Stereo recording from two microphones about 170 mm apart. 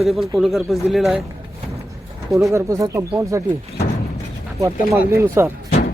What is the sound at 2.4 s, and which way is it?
Speech, 20° right (ahead or behind).